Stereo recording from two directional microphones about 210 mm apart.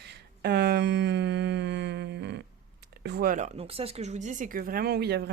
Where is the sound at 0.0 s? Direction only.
55° right (ahead or behind).